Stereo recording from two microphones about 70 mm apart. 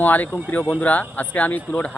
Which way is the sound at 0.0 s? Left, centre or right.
Left.